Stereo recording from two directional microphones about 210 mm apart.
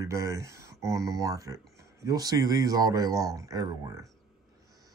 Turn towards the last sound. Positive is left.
turn(degrees=-15)  # may be behind; listen again after turning